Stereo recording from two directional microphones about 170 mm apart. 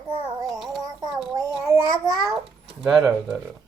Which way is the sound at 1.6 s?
15° right (ahead or behind).